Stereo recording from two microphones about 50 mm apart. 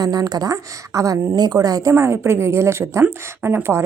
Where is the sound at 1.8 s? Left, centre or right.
Right.